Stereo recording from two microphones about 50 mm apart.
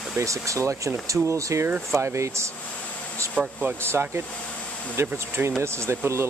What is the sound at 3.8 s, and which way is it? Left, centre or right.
Speech, right.